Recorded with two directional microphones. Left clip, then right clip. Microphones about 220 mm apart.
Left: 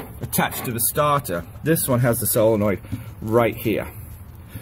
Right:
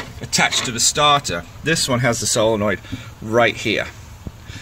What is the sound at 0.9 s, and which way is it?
Speech, centre (ahead or behind).